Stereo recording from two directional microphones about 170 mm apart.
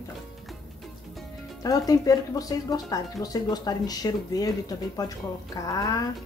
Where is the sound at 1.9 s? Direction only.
20° left (ahead or behind).